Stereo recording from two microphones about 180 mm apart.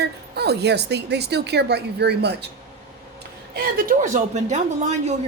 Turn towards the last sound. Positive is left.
turn(degrees=-40)  # may be behind; listen again after turning